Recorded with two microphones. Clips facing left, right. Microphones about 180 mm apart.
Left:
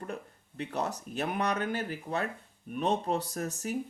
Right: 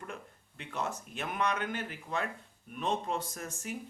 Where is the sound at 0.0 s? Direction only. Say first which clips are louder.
Left 5 dB; 40° left (ahead or behind).